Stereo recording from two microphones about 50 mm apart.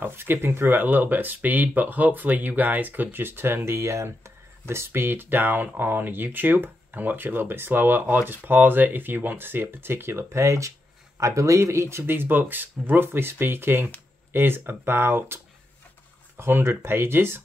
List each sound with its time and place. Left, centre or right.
0.0 s speech: right
12.0 s speech: right